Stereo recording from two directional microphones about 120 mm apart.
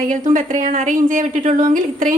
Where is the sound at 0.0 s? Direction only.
90° right.